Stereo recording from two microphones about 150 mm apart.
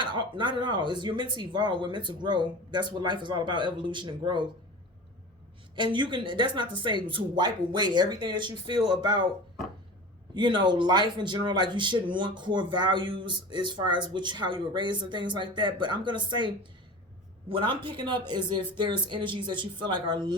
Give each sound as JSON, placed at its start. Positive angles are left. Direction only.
{"t": 0.0, "sound": "speech", "side_deg": -30}
{"t": 5.7, "sound": "speech", "side_deg": -30}
{"t": 10.3, "sound": "speech", "side_deg": -30}
{"t": 17.5, "sound": "speech", "side_deg": -35}